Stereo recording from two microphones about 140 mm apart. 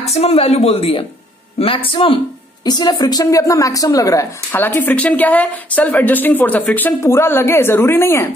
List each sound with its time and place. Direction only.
0.0 s speech: 50° left (ahead or behind)
2.6 s a woman's voice: 30° left (ahead or behind)
4.5 s a woman's voice: 15° left (ahead or behind)